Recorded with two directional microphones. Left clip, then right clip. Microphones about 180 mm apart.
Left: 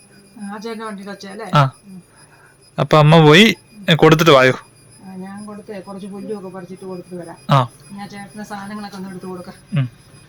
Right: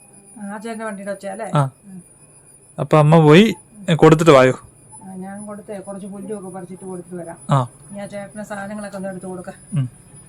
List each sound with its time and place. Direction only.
0.6 s speech: 35° right (ahead or behind)
1.5 s speech: 5° left (ahead or behind)
2.7 s speech: 5° left (ahead or behind)
7.4 s speech: 5° right (ahead or behind)
8.0 s speech: 30° right (ahead or behind)